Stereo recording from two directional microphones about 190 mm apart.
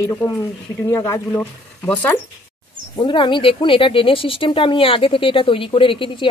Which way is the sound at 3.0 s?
25° left (ahead or behind).